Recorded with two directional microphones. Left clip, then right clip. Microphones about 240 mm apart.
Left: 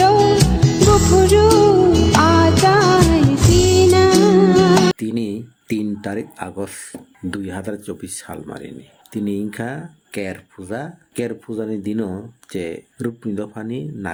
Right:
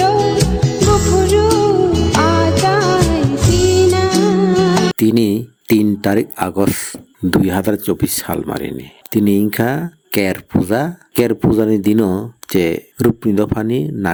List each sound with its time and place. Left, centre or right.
0.0 s music: centre
4.9 s speech: right